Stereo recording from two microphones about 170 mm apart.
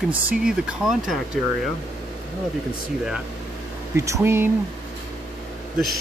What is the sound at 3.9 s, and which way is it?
Speech, 15° right (ahead or behind).